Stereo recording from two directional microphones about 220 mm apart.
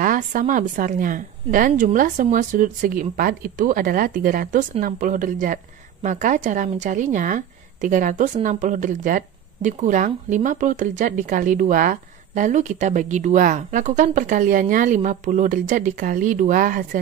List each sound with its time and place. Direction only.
0.0 s a woman's voice: 35° right (ahead or behind)